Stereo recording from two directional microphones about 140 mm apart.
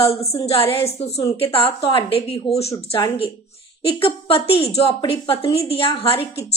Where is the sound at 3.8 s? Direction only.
40° left (ahead or behind).